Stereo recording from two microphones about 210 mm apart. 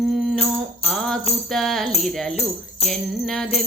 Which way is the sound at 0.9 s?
Centre (ahead or behind).